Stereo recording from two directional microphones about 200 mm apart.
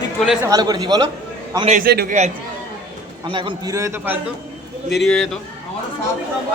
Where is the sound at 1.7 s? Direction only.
45° right (ahead or behind).